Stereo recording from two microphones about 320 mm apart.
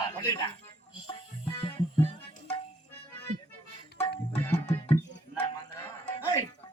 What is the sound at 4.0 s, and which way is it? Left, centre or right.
Music, centre.